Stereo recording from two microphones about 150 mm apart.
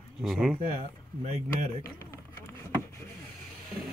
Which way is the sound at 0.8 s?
45° right (ahead or behind).